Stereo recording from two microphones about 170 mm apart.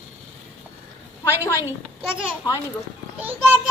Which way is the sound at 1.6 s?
5° right (ahead or behind).